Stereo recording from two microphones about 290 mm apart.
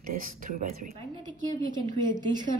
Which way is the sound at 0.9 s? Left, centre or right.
Centre.